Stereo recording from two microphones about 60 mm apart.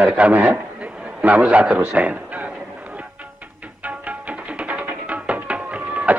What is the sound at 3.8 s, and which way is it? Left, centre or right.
Music, right.